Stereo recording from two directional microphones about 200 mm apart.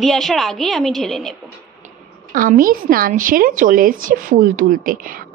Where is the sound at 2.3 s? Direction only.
45° right (ahead or behind).